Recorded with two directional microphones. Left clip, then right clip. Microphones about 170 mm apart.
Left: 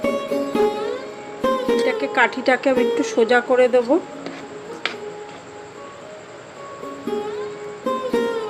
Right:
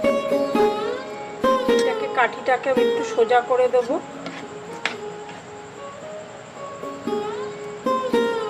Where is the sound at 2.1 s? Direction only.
55° left (ahead or behind).